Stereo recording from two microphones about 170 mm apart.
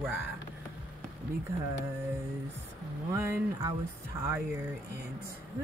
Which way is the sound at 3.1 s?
15° right (ahead or behind).